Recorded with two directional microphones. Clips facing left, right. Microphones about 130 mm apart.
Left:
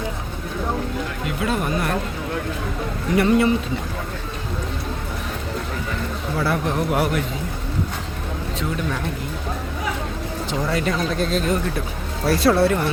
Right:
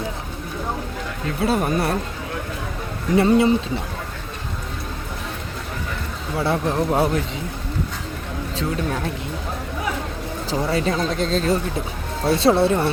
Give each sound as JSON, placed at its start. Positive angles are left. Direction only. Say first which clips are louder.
{"t": 1.4, "sound": "speech", "louder": "right 3 dB", "side_deg": -35}
{"t": 3.2, "sound": "speech", "louder": "right 1 dB", "side_deg": -25}
{"t": 6.4, "sound": "speech", "louder": "right 2 dB", "side_deg": -25}
{"t": 10.5, "sound": "speech", "louder": "right 2 dB", "side_deg": -30}